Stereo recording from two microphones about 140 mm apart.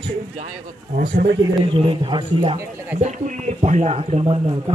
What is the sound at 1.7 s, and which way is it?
Speech, 35° right (ahead or behind).